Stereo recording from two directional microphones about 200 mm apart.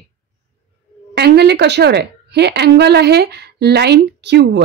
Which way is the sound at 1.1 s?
55° right (ahead or behind).